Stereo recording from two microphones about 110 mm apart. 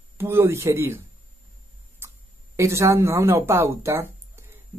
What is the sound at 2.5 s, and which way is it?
Speech, 25° right (ahead or behind).